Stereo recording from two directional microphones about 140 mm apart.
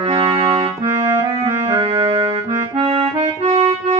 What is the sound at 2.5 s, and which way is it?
Accordion, 40° right (ahead or behind).